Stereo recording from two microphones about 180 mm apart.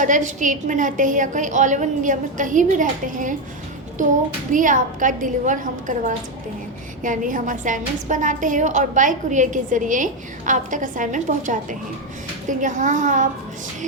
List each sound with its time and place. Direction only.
0.0 s a woman's voice: 45° right (ahead or behind)